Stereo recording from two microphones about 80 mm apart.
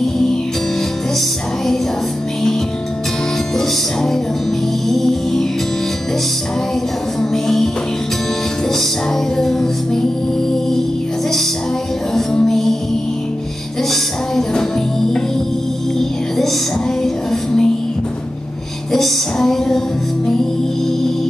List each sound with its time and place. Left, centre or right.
3.5 s music: centre
7.2 s music: centre
9.4 s music: centre
12.1 s music: centre
14.3 s music: centre
17.0 s music: centre
18.9 s music: centre